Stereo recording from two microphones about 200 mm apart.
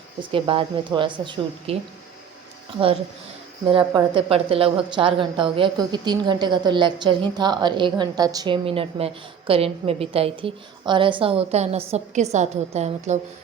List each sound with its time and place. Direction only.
0.2 s a woman's voice: 25° right (ahead or behind)
3.7 s a woman's voice: 25° right (ahead or behind)